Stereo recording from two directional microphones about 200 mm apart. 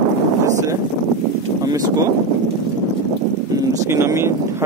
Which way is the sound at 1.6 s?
20° right (ahead or behind).